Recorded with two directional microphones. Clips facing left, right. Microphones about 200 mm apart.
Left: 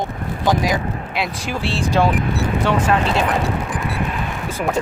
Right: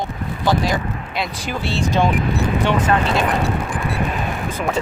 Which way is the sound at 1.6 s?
30° left (ahead or behind).